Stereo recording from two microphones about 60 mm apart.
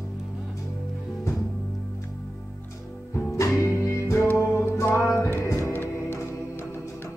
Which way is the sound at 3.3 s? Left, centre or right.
Left.